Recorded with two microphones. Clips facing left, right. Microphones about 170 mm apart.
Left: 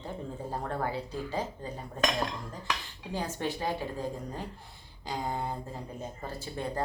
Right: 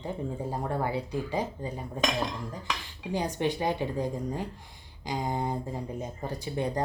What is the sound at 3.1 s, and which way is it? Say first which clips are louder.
Speech: right 5 dB; 15° right (ahead or behind).